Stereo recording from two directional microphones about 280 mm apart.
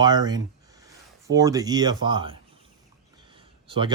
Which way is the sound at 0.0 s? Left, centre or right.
Centre.